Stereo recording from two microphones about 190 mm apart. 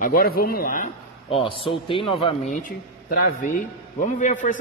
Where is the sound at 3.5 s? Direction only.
40° left (ahead or behind).